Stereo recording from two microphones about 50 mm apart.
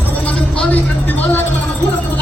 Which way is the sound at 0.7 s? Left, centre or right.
Left.